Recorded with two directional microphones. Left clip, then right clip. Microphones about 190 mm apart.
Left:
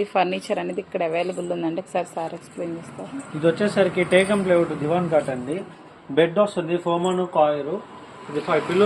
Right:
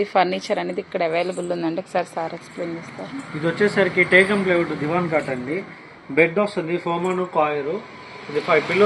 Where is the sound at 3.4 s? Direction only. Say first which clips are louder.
Even; 50° left (ahead or behind).